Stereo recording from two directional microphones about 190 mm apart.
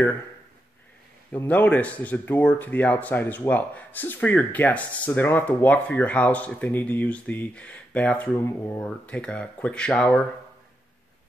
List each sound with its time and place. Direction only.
1.3 s speech: 10° left (ahead or behind)